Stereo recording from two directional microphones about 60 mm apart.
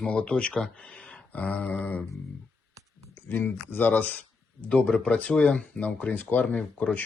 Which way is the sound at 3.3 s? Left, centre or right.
Left.